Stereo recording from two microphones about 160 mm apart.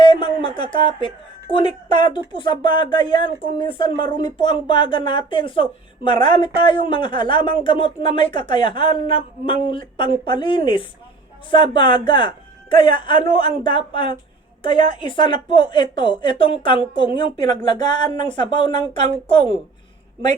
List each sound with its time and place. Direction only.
0.0 s speech: 30° left (ahead or behind)